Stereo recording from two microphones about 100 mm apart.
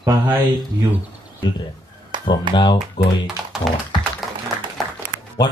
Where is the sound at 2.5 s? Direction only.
50° left (ahead or behind).